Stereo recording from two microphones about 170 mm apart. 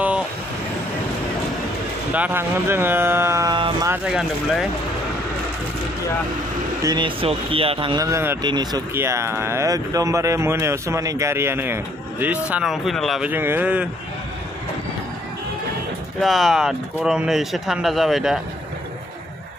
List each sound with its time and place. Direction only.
2.1 s speech: 10° right (ahead or behind)
3.9 s speech: 5° right (ahead or behind)
6.8 s speech: 25° right (ahead or behind)
8.0 s speech: 15° right (ahead or behind)
8.9 s speech: 15° right (ahead or behind)
16.2 s speech: centre (ahead or behind)